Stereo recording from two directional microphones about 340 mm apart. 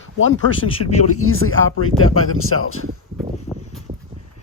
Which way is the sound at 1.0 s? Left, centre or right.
Left.